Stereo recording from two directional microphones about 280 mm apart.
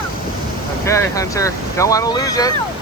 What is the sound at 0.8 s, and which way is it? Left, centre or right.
Speech, centre.